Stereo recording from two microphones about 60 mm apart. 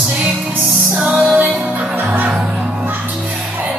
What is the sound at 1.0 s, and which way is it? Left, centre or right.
Music, centre.